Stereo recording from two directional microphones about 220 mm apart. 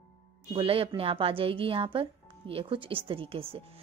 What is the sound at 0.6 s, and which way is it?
A woman's voice, 25° right (ahead or behind).